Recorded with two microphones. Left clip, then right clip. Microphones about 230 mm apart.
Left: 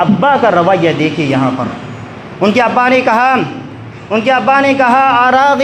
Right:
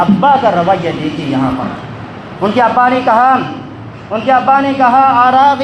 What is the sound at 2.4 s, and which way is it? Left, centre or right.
A man's voice, left.